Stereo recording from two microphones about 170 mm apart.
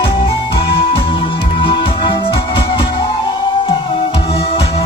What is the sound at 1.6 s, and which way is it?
Music, 30° left (ahead or behind).